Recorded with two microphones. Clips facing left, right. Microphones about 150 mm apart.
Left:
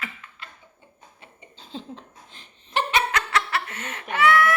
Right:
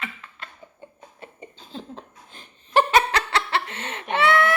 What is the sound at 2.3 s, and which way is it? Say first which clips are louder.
Giggle: right 7 dB; 45° right (ahead or behind).